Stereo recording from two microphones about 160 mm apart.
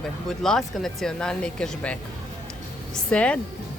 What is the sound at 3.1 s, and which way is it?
Speech, 10° left (ahead or behind).